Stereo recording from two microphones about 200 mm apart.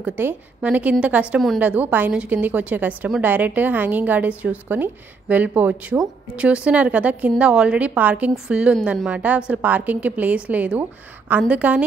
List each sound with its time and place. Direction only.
0.0 s a woman's voice: 10° right (ahead or behind)